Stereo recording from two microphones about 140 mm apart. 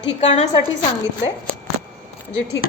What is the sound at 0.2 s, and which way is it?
Speech, 50° left (ahead or behind).